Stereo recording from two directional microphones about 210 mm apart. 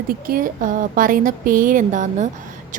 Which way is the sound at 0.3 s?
40° right (ahead or behind).